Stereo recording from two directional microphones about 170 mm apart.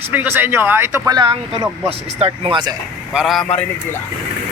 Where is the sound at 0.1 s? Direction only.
10° right (ahead or behind); by 2.7 s 30° right (ahead or behind).